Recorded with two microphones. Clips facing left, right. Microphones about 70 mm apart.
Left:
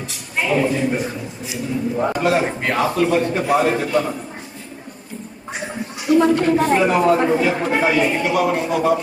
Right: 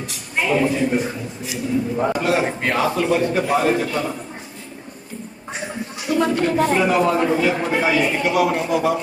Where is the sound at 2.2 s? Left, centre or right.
Centre.